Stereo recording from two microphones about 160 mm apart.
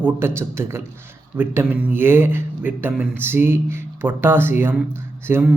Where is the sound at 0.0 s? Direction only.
15° right (ahead or behind).